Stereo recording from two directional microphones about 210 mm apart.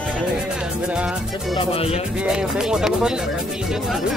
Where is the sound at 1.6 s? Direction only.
25° left (ahead or behind).